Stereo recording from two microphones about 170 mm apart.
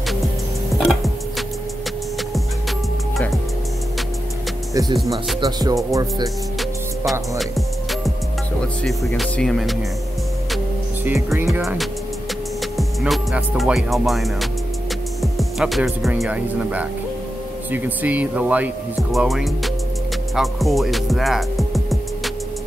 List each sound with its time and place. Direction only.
0.7 s music: centre (ahead or behind)
5.4 s speech: 20° right (ahead or behind)
7.1 s music: centre (ahead or behind)
11.3 s speech: 10° right (ahead or behind)
12.7 s music: centre (ahead or behind)
17.6 s speech: 10° right (ahead or behind)
19.1 s music: centre (ahead or behind)